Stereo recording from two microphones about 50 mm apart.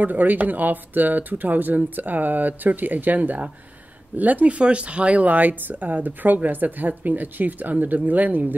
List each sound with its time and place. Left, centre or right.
0.0 s speech: right